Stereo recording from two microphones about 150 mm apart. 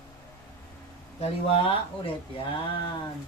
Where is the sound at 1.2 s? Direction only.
40° left (ahead or behind).